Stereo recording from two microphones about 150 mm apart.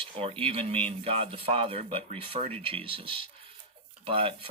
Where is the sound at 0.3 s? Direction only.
40° right (ahead or behind).